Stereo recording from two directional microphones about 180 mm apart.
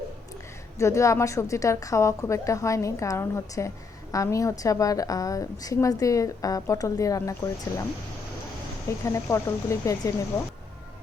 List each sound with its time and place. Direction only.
0.8 s a woman's voice: 15° left (ahead or behind)
8.9 s a woman's voice: 15° left (ahead or behind)